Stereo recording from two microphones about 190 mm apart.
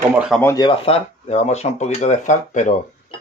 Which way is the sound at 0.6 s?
30° left (ahead or behind).